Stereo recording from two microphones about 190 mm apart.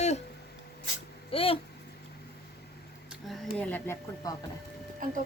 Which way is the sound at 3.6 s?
10° left (ahead or behind).